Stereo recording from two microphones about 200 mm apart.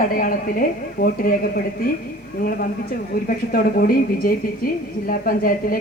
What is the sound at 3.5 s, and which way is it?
Speech, 50° left (ahead or behind).